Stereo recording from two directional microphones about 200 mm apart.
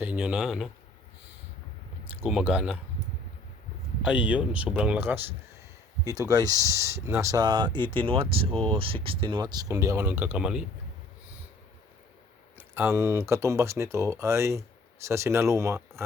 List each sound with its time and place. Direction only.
0.0 s speech: 5° right (ahead or behind)
2.2 s speech: 5° right (ahead or behind)
4.0 s speech: 5° right (ahead or behind)
12.5 s speech: 10° right (ahead or behind)